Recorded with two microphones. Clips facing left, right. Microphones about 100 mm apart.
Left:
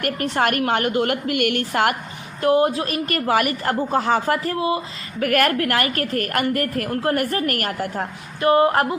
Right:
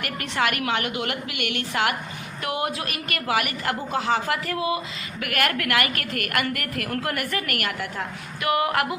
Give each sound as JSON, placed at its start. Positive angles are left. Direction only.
{"t": 0.0, "sound": "a woman's voice", "side_deg": 45}
{"t": 2.4, "sound": "a woman's voice", "side_deg": 35}
{"t": 4.5, "sound": "a woman's voice", "side_deg": 30}